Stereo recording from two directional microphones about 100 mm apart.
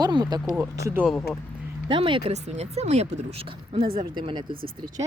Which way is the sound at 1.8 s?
55° right (ahead or behind).